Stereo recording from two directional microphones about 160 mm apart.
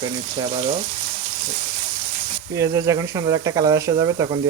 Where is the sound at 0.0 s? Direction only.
35° right (ahead or behind).